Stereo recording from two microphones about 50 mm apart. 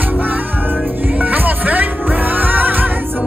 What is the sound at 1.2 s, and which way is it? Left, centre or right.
Music, right.